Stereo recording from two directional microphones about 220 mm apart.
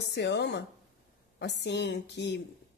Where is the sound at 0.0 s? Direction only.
50° left (ahead or behind).